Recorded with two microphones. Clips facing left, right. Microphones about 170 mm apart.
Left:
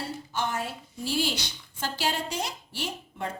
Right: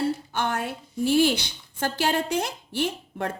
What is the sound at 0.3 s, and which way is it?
A woman's voice, 60° right (ahead or behind).